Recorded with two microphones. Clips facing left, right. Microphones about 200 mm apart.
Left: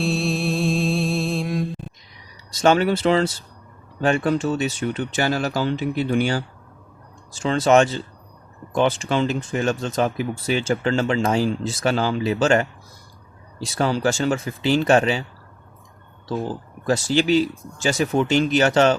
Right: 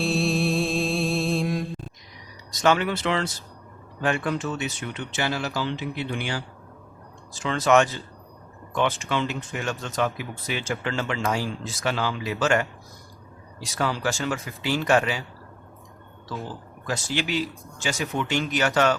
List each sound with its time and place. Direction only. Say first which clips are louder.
0.0 s music: left 1 dB; centre (ahead or behind)
2.6 s speech: left 5 dB; 35° left (ahead or behind)
7.4 s speech: left 4 dB; 30° left (ahead or behind)
13.7 s speech: left 6 dB; 30° left (ahead or behind)
16.9 s speech: left 9 dB; 30° left (ahead or behind)